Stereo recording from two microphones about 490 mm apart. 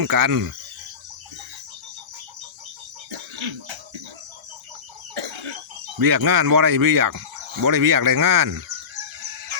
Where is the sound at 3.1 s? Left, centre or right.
Right.